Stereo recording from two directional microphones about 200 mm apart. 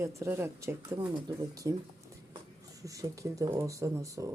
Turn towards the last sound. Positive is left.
turn(degrees=-15)  # may be behind; listen again after turning